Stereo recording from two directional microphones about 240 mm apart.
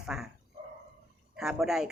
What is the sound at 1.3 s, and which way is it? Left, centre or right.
Speech, centre.